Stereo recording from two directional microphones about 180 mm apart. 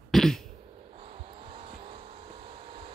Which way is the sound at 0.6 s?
30° right (ahead or behind).